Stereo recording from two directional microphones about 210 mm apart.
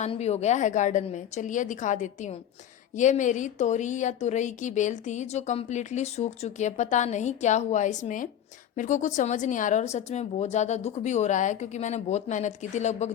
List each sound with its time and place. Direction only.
0.0 s speech: 30° left (ahead or behind)